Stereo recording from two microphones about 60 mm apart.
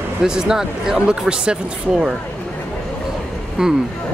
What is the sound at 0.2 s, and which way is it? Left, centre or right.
Speech, centre.